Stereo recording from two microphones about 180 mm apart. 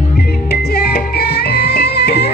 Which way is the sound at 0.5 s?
65° left (ahead or behind).